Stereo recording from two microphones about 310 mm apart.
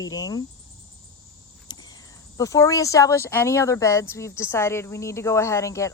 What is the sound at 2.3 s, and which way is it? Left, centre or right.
Speech, centre.